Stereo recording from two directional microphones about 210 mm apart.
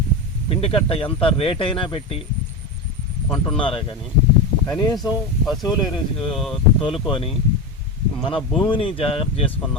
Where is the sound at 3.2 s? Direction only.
20° left (ahead or behind).